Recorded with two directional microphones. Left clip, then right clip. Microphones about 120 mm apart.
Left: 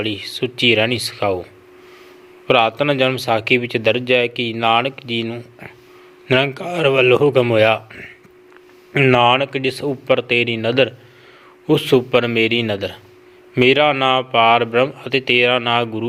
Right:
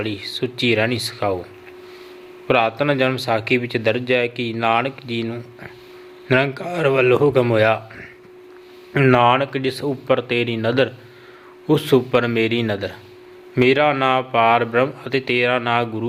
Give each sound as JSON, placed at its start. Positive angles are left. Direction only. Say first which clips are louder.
{"t": 0.0, "sound": "a man's voice", "louder": "left 2 dB", "side_deg": 25}
{"t": 2.5, "sound": "a man's voice", "louder": "left 3 dB", "side_deg": 25}